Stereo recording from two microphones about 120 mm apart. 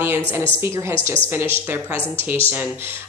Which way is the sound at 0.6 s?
20° right (ahead or behind).